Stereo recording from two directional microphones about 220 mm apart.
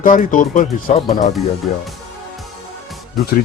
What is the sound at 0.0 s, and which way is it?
Speech, 35° left (ahead or behind).